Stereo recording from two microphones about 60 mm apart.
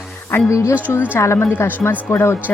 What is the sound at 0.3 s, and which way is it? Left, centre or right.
Speech, left.